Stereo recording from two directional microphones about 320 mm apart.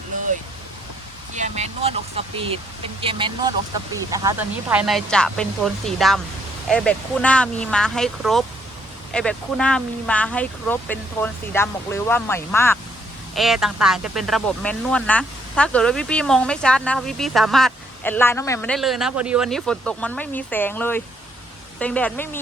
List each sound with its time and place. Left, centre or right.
1.4 s speech: right; by 22.4 s centre